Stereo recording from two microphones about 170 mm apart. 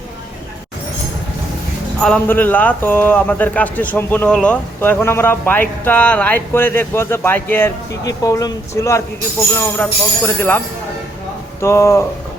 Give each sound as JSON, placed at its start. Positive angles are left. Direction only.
{"t": 2.0, "sound": "speech", "side_deg": 5}
{"t": 11.6, "sound": "speech", "side_deg": 15}